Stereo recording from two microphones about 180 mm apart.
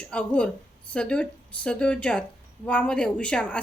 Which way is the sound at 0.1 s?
5° left (ahead or behind).